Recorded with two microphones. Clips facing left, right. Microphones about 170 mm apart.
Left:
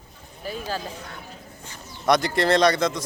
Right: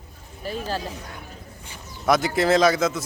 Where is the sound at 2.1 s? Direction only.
5° right (ahead or behind).